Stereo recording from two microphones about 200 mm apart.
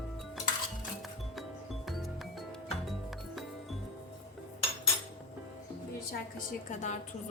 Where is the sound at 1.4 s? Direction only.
Centre (ahead or behind).